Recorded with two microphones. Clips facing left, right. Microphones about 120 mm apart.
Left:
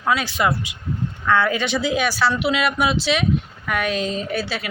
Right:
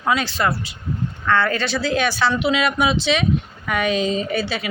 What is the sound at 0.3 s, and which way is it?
A woman's voice, 15° left (ahead or behind).